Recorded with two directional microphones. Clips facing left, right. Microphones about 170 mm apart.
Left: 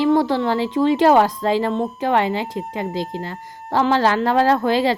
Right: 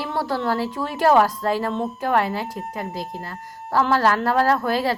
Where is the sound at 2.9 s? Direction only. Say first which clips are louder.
Left 5 dB; 90° left.